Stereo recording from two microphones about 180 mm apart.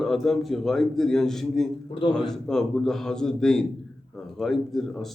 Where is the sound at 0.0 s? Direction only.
Centre (ahead or behind).